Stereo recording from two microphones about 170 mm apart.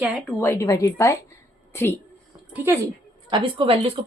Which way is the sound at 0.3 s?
15° left (ahead or behind).